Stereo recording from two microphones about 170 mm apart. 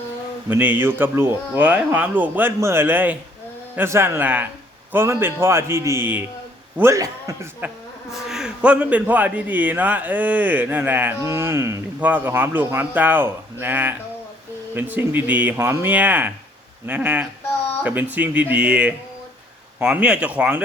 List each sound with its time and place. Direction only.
0.4 s a man's voice: 10° right (ahead or behind)
8.1 s a man's voice: 5° right (ahead or behind)